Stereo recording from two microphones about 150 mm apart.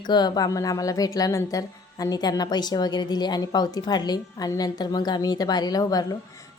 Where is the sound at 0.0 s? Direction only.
30° left (ahead or behind).